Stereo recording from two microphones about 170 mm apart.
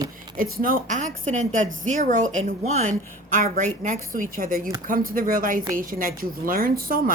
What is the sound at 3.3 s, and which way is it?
A woman's voice, 55° right (ahead or behind).